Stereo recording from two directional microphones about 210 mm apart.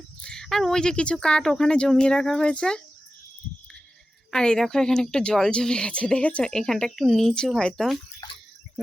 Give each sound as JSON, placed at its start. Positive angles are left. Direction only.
{"t": 0.2, "sound": "speech", "side_deg": 5}
{"t": 4.3, "sound": "speech", "side_deg": 5}
{"t": 8.2, "sound": "a sound", "side_deg": 20}